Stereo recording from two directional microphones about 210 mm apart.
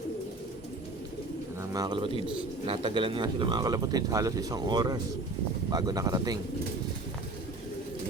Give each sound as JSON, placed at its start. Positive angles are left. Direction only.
{"t": 1.7, "sound": "speech", "side_deg": -20}